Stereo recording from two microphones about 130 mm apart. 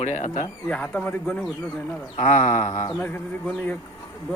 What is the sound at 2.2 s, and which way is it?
Speech, 70° left (ahead or behind).